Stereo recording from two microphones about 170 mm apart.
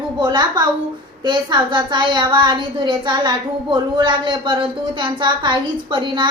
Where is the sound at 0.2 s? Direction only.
25° right (ahead or behind).